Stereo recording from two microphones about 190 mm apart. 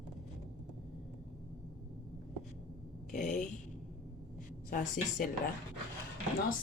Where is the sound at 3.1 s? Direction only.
40° left (ahead or behind).